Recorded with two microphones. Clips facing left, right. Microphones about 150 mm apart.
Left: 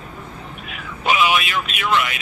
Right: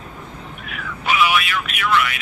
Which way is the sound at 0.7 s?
20° left (ahead or behind).